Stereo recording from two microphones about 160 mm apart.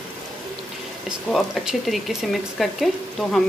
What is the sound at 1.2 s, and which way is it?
Speech, centre (ahead or behind).